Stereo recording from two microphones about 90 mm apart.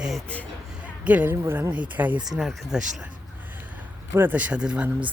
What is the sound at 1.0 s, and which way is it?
Speech, 20° right (ahead or behind).